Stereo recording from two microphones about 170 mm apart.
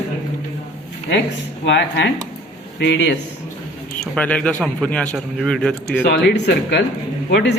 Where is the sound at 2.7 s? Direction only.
90° left.